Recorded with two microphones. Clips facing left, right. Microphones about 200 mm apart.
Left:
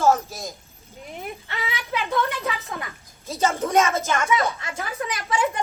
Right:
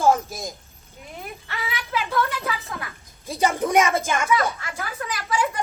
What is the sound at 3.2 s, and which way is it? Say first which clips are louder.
Speech: right 1 dB; 15° right (ahead or behind).